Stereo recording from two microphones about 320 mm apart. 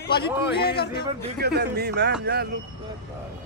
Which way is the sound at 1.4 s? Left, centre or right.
Right.